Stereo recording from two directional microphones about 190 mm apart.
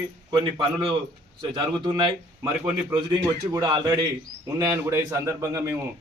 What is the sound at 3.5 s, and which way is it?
A man's voice, 25° right (ahead or behind).